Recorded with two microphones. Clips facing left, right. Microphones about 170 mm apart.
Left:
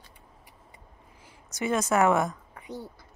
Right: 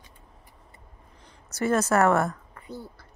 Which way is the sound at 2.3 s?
15° left (ahead or behind).